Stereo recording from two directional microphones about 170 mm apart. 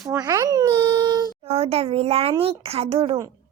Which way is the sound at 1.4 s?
35° right (ahead or behind).